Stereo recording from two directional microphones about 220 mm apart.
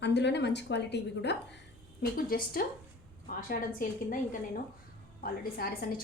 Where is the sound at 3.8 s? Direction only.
40° left (ahead or behind).